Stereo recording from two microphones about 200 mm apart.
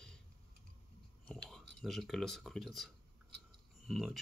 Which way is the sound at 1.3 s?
Centre (ahead or behind).